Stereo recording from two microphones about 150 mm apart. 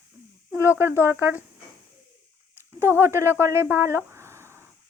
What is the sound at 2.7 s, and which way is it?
Speech, 15° right (ahead or behind).